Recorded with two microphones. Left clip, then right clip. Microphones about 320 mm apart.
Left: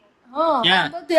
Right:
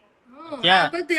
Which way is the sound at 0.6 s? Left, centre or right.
Centre.